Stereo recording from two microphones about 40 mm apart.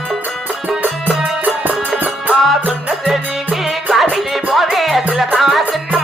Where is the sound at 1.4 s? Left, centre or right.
Right.